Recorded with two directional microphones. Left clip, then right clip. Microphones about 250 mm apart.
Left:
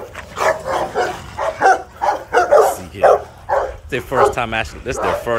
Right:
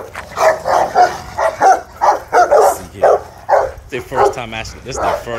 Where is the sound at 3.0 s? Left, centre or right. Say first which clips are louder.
Right 1 dB; right.